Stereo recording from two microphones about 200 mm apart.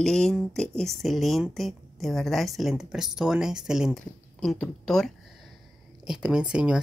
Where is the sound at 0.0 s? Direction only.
5° left (ahead or behind).